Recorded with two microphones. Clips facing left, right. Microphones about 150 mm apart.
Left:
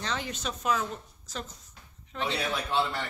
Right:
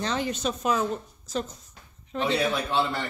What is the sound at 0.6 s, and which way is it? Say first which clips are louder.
Speech: right 2 dB; 25° right (ahead or behind).